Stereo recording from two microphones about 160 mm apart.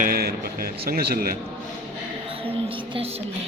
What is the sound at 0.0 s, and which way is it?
A man's voice, 70° right (ahead or behind).